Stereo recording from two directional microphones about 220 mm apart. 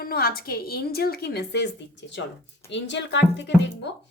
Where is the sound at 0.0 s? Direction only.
45° left (ahead or behind).